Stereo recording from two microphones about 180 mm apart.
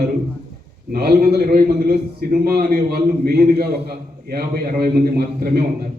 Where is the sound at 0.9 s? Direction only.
60° right (ahead or behind).